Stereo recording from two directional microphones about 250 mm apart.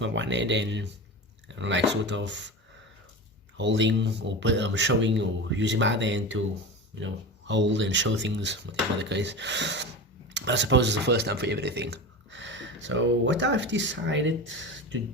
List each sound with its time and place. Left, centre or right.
0.0 s a man's voice: right
3.6 s a man's voice: right